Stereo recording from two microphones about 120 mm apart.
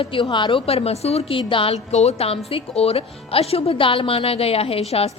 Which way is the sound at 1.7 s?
65° left (ahead or behind).